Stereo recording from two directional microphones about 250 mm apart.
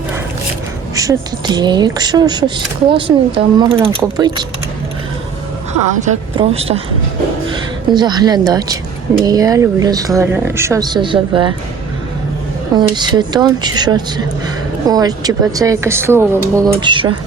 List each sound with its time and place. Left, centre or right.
0.9 s speech: centre
6.1 s speech: right
7.9 s speech: centre
12.7 s speech: centre